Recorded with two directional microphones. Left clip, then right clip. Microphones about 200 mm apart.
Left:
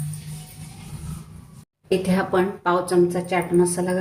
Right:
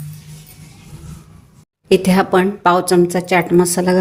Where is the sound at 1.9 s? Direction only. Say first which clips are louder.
Right 8 dB; 50° right (ahead or behind).